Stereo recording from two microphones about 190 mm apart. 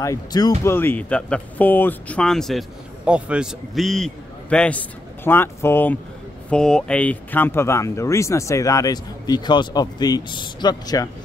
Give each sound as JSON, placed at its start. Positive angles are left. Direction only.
{"t": 0.0, "sound": "a man's voice", "side_deg": 20}